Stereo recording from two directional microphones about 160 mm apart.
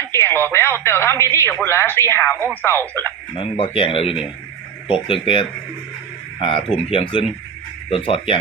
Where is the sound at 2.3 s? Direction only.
10° right (ahead or behind).